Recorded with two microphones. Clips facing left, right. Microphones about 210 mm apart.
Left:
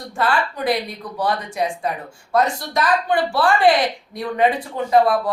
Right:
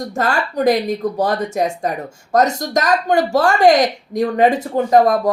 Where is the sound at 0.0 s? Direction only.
45° right (ahead or behind).